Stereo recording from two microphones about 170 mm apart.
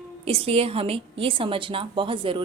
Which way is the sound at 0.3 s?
35° right (ahead or behind).